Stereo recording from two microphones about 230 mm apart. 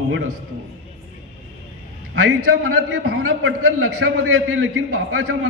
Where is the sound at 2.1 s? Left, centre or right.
Right.